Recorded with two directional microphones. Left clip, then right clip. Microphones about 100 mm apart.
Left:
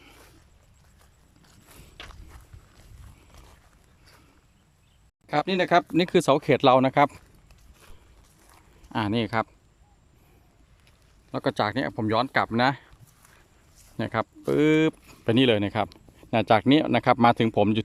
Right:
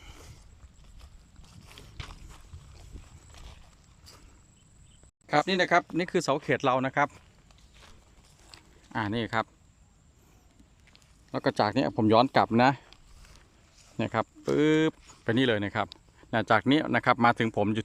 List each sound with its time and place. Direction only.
2.0 s walk: 5° right (ahead or behind)
3.3 s horse: centre (ahead or behind)
5.2 s speech: 5° left (ahead or behind)
6.0 s speech: 30° left (ahead or behind); by 7.2 s 45° left (ahead or behind)
8.9 s speech: 15° left (ahead or behind)
11.3 s speech: centre (ahead or behind)
13.9 s speech: 5° right (ahead or behind); by 17.8 s 20° left (ahead or behind)